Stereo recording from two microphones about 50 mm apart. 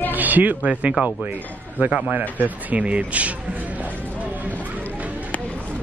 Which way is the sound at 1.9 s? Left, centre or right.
Centre.